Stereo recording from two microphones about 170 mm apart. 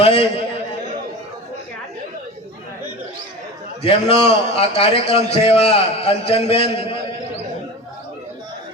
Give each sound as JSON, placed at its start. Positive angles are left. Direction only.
{"t": 0.0, "sound": "a man's voice", "side_deg": 35}
{"t": 3.8, "sound": "a man's voice", "side_deg": 35}